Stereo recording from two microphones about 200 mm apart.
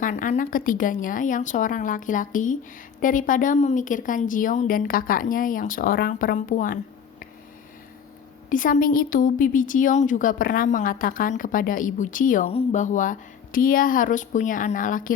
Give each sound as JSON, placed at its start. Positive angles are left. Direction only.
{"t": 0.0, "sound": "a woman's voice", "side_deg": 40}
{"t": 8.4, "sound": "a woman's voice", "side_deg": 40}